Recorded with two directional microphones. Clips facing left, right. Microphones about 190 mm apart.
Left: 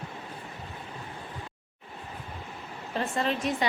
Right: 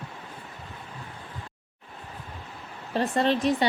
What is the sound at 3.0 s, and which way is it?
Speech, 35° right (ahead or behind).